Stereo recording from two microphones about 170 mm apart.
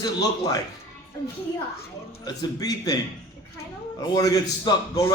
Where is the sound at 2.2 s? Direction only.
25° left (ahead or behind).